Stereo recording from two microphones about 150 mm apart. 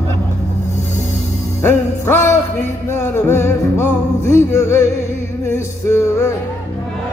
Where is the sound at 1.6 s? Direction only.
15° left (ahead or behind).